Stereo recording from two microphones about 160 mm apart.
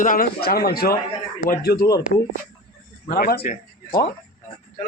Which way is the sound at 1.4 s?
60° left (ahead or behind).